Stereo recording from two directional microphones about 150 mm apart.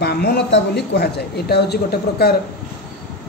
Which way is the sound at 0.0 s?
90° left.